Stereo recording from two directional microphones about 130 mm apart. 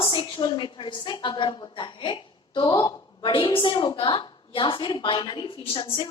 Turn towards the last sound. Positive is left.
turn(degrees=40)  # may be behind; listen again after turning